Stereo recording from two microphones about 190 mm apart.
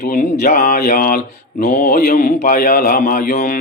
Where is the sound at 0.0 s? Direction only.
55° left (ahead or behind).